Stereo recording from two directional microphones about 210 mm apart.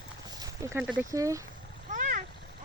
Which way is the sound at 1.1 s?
15° right (ahead or behind).